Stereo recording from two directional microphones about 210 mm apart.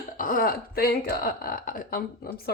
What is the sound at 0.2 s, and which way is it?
Speech, 40° left (ahead or behind).